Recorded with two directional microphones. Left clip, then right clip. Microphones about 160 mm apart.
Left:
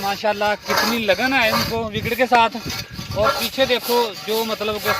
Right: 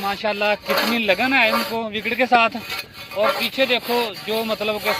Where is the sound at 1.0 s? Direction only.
40° left (ahead or behind).